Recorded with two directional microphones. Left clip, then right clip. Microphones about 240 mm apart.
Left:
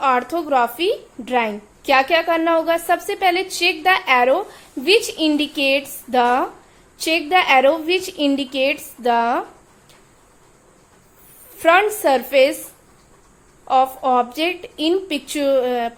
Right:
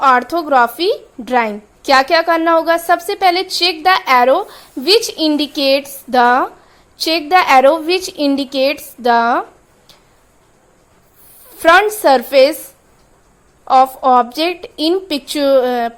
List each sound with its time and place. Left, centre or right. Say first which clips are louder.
0.0 s a woman's voice: right 6 dB; right
11.5 s a woman's voice: right 5 dB; right
13.7 s a woman's voice: right 6 dB; right